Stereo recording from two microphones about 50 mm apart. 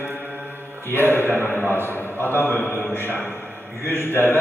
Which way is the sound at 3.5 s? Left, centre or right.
Right.